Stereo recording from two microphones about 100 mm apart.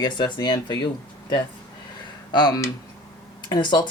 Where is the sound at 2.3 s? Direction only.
45° left (ahead or behind).